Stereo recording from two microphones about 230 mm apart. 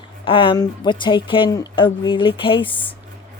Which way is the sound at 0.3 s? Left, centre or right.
Left.